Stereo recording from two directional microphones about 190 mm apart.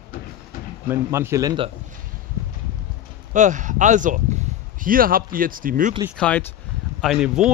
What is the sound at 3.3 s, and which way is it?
Speech, 40° right (ahead or behind).